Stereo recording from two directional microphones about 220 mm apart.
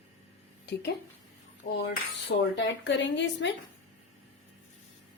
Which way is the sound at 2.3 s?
45° left (ahead or behind).